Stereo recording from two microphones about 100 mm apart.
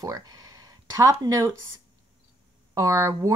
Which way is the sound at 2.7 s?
30° right (ahead or behind).